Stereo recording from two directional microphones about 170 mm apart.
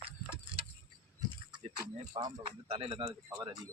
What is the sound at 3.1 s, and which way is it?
Speech, 20° right (ahead or behind).